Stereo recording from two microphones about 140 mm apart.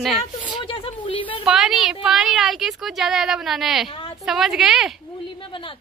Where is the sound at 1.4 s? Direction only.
5° right (ahead or behind).